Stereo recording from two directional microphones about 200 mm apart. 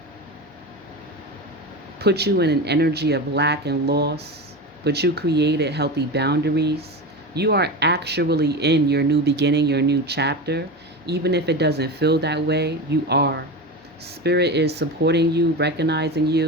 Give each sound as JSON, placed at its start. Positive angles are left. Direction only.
{"t": 2.0, "sound": "speech", "side_deg": -55}